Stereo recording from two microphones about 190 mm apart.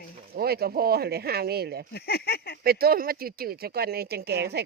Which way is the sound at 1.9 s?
55° left (ahead or behind).